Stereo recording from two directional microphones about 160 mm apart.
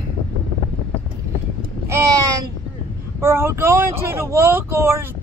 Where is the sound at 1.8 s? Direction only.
20° right (ahead or behind).